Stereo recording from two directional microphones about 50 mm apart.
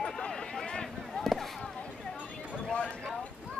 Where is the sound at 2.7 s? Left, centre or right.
Left.